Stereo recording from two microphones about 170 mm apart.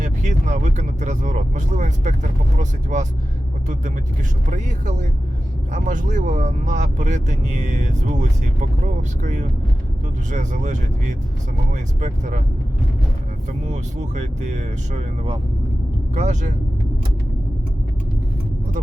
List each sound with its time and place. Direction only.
0.0 s speech: 45° right (ahead or behind)
4.4 s speech: 45° right (ahead or behind)
13.7 s speech: 45° right (ahead or behind)